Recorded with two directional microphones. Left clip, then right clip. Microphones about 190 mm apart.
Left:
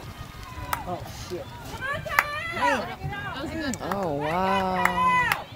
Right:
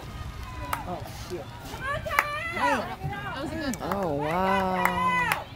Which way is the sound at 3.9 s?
30° left (ahead or behind).